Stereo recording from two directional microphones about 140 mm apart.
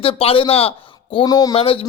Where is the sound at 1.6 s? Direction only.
45° left (ahead or behind).